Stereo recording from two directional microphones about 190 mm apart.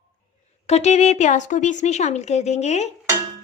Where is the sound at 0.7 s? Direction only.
35° left (ahead or behind).